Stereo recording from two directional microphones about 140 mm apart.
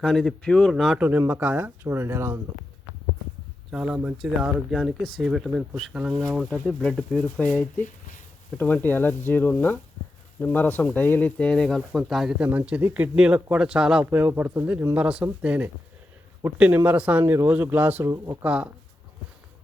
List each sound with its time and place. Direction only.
0.0 s speech: centre (ahead or behind)
1.0 s speech: 15° right (ahead or behind)
3.7 s speech: 5° right (ahead or behind)
4.8 s speech: 5° left (ahead or behind)